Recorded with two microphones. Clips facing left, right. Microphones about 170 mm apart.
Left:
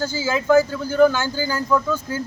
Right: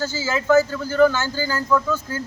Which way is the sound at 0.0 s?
15° left (ahead or behind).